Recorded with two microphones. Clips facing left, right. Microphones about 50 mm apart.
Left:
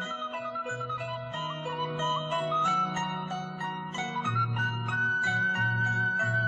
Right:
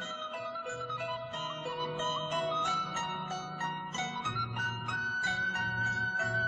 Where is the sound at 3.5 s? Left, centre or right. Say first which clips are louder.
Left 1 dB; centre.